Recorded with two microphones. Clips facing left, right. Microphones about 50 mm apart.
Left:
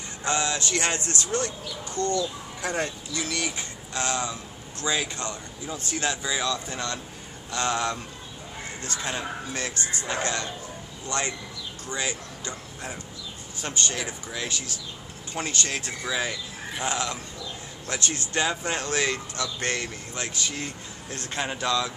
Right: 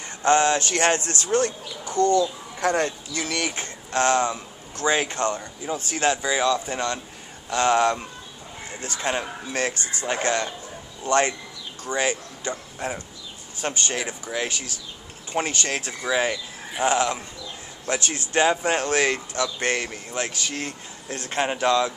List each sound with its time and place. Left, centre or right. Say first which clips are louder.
0.2 s speech: right 8 dB; right
2.6 s speech: right 6 dB; right
6.2 s speech: right 6 dB; right
12.4 s speech: right 8 dB; right
20.2 s speech: right 2 dB; right
21.3 s speech: right 6 dB; right